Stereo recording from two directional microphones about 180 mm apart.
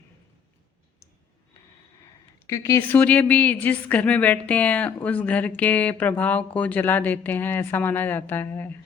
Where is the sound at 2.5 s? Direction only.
15° left (ahead or behind).